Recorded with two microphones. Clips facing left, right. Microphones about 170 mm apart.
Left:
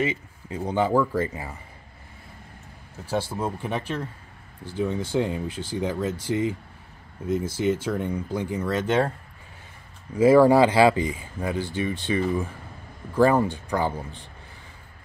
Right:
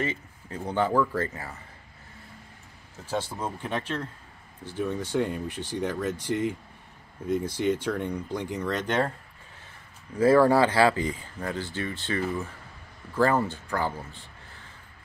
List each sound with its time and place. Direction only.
0.0 s speech: 10° left (ahead or behind)
3.1 s speech: 10° left (ahead or behind)
10.1 s speech: 10° left (ahead or behind)